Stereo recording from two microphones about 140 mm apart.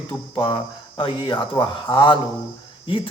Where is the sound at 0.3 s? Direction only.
35° left (ahead or behind).